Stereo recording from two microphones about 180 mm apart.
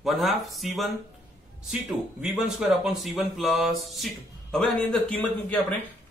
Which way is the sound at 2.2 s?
5° right (ahead or behind).